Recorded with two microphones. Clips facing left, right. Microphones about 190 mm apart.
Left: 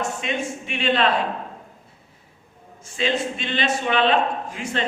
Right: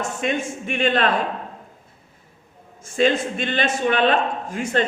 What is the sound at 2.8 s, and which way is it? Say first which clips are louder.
A man's voice: right 5 dB; 50° right (ahead or behind).